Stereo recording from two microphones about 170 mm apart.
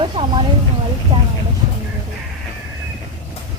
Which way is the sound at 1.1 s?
25° right (ahead or behind).